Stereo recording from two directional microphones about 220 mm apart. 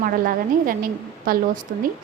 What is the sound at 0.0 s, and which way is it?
A woman's voice, 40° right (ahead or behind).